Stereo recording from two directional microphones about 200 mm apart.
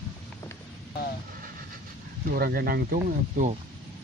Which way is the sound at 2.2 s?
50° right (ahead or behind).